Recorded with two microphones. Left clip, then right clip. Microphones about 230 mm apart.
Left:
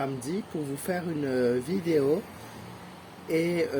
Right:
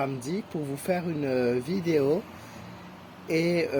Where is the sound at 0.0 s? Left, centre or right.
Right.